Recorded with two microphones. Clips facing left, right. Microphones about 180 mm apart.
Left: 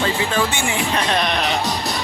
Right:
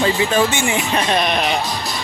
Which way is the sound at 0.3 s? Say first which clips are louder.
Right 3 dB; 20° right (ahead or behind).